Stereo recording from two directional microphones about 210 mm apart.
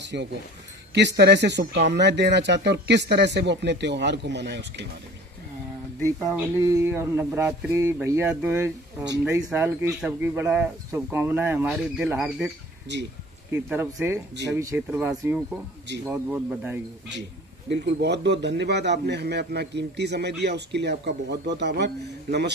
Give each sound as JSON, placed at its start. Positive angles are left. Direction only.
{"t": 0.0, "sound": "speech", "side_deg": -55}
{"t": 6.1, "sound": "speech", "side_deg": -10}
{"t": 13.5, "sound": "speech", "side_deg": -10}
{"t": 17.6, "sound": "a man's voice", "side_deg": -55}